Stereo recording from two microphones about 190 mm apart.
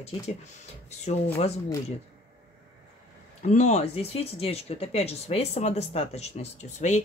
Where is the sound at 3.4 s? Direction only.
40° left (ahead or behind).